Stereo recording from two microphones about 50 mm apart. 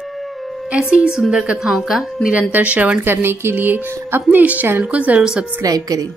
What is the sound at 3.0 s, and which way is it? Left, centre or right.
A woman's voice, right.